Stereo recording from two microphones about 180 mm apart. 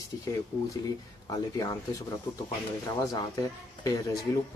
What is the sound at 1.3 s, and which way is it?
Speech, 20° left (ahead or behind).